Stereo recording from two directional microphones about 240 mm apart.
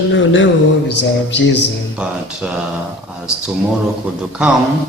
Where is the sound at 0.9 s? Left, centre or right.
Left.